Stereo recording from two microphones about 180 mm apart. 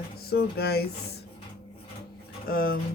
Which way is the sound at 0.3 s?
60° left (ahead or behind).